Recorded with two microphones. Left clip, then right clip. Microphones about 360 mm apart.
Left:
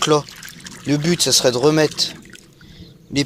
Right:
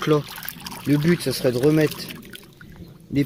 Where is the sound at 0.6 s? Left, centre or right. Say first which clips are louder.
Right 2 dB; centre.